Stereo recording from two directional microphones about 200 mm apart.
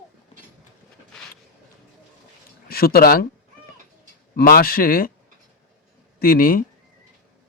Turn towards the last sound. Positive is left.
turn(degrees=45)  # may be behind; listen again after turning